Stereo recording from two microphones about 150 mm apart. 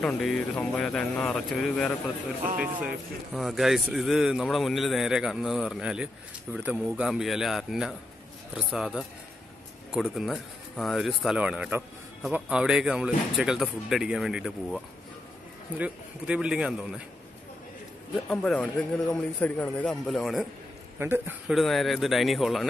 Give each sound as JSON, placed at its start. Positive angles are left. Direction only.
{"t": 0.0, "sound": "a man's voice", "side_deg": 5}
{"t": 3.3, "sound": "a man's voice", "side_deg": 0}
{"t": 10.1, "sound": "a man's voice", "side_deg": 0}
{"t": 15.8, "sound": "a man's voice", "side_deg": -5}
{"t": 18.3, "sound": "a man's voice", "side_deg": 5}
{"t": 21.0, "sound": "a man's voice", "side_deg": -15}
{"t": 21.5, "sound": "a man's voice", "side_deg": 0}